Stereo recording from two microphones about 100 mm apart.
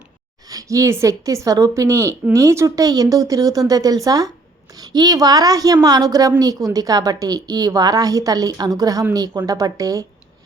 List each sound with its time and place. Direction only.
0.4 s a woman's voice: 35° right (ahead or behind)